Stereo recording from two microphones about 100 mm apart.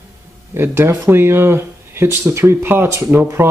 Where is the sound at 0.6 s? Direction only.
25° right (ahead or behind).